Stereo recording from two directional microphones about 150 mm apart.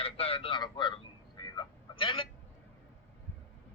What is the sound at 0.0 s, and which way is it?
Speech, 40° left (ahead or behind).